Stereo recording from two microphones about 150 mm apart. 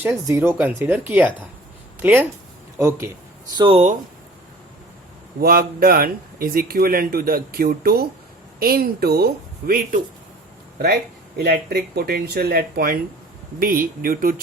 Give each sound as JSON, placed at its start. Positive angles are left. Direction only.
{"t": 0.0, "sound": "speech", "side_deg": -20}
{"t": 3.6, "sound": "speech", "side_deg": -45}
{"t": 5.4, "sound": "speech", "side_deg": -85}
{"t": 11.4, "sound": "speech", "side_deg": -90}
{"t": 13.6, "sound": "speech", "side_deg": -70}